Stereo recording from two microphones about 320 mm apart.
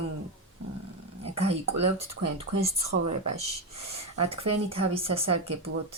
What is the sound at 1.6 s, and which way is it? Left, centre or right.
Speech, right.